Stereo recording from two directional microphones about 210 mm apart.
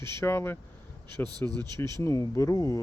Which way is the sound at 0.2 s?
10° left (ahead or behind).